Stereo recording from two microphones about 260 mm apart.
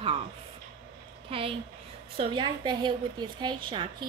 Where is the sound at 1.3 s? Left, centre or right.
Right.